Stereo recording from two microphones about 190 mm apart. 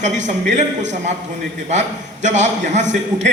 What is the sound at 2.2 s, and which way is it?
A man's voice, 40° right (ahead or behind).